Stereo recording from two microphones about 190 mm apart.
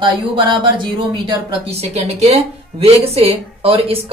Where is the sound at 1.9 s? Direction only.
35° right (ahead or behind).